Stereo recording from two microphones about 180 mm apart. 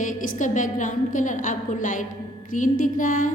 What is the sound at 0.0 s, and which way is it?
A woman's voice, 45° left (ahead or behind).